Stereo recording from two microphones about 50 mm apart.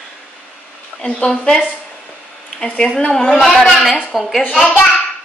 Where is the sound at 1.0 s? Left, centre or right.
Centre.